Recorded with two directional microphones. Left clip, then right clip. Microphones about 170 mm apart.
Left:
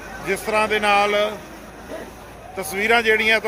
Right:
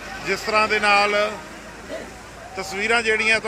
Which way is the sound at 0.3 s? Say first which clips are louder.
Even; 15° left (ahead or behind).